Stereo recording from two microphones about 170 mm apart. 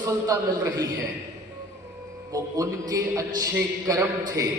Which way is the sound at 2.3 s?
20° right (ahead or behind).